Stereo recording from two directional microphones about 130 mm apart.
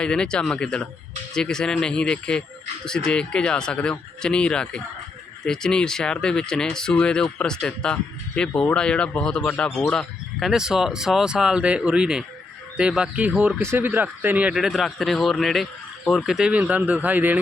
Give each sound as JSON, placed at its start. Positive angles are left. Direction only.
{"t": 0.0, "sound": "speech", "side_deg": 5}